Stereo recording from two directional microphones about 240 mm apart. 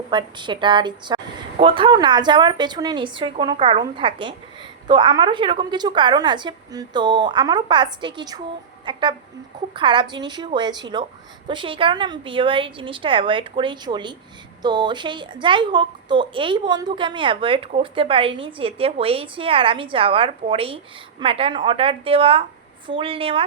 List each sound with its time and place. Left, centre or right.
0.1 s a woman's voice: centre